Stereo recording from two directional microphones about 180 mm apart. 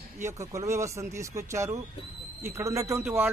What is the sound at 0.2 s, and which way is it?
A man's voice, 15° right (ahead or behind).